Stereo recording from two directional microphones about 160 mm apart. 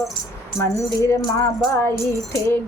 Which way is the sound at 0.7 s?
20° left (ahead or behind).